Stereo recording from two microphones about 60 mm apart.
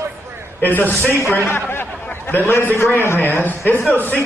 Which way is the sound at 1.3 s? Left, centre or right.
Left.